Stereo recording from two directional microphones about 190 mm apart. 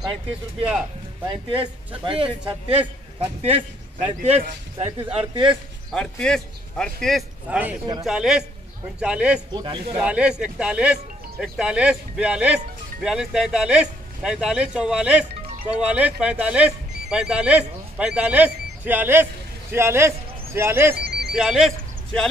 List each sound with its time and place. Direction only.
0.0 s a man's voice: 25° right (ahead or behind)
5.5 s speech: centre (ahead or behind)
9.5 s speech: 25° right (ahead or behind)
9.9 s a man's voice: 5° right (ahead or behind)
21.3 s speech: centre (ahead or behind)